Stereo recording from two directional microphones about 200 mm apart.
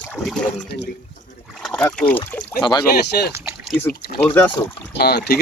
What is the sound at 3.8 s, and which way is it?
Speech, 10° left (ahead or behind).